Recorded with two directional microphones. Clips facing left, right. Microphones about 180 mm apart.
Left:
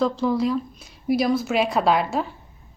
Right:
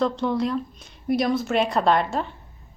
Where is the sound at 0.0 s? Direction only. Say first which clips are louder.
Left 2 dB; centre (ahead or behind).